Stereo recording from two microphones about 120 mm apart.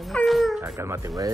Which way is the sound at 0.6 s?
20° right (ahead or behind).